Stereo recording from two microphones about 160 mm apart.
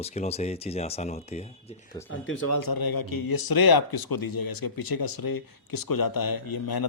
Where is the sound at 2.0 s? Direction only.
25° left (ahead or behind).